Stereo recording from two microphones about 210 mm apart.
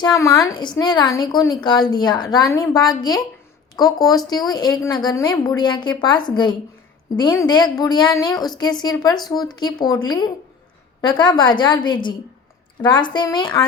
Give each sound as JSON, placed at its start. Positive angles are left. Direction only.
{"t": 0.0, "sound": "a woman's voice", "side_deg": 15}